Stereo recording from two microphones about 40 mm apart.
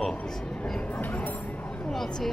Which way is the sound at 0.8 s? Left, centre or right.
Left.